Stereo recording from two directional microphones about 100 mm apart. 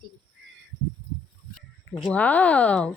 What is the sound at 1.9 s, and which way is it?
Speech, 5° left (ahead or behind).